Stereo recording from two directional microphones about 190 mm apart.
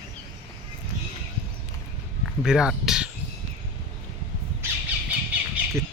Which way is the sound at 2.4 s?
5° right (ahead or behind).